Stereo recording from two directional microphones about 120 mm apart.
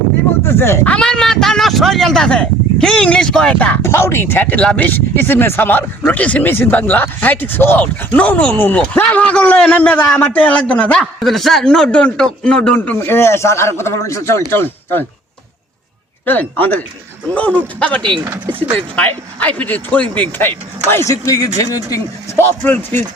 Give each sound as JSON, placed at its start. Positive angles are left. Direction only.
{"t": 0.4, "sound": "a man's voice", "side_deg": 20}
{"t": 0.9, "sound": "speech", "side_deg": 10}
{"t": 16.2, "sound": "speech", "side_deg": 15}
{"t": 18.0, "sound": "speech", "side_deg": -40}
{"t": 18.9, "sound": "speech", "side_deg": 10}
{"t": 20.9, "sound": "a man's voice", "side_deg": 25}